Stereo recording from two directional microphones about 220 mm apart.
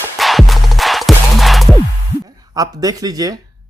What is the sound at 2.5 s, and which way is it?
Speech, 15° right (ahead or behind).